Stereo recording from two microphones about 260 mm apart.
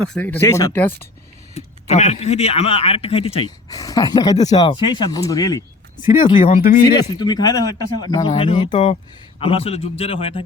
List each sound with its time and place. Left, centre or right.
0.0 s speech: centre
1.5 s a man's voice: left
7.1 s a man's voice: centre